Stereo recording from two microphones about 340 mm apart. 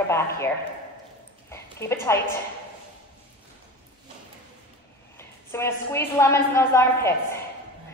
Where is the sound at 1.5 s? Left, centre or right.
Centre.